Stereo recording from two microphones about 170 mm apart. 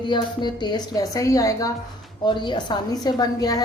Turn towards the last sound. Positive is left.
turn(degrees=20)  # may be behind; listen again after turning